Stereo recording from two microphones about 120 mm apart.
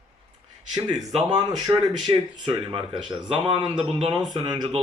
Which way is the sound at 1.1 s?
35° right (ahead or behind).